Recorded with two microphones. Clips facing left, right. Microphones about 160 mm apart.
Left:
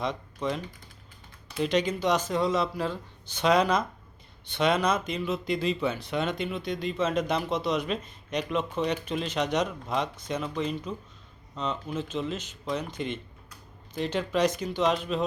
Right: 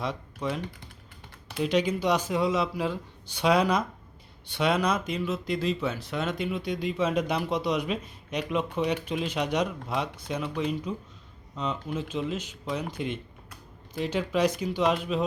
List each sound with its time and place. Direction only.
0.0 s speech: 5° right (ahead or behind)